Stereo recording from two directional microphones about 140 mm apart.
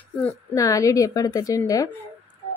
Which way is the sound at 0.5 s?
25° left (ahead or behind).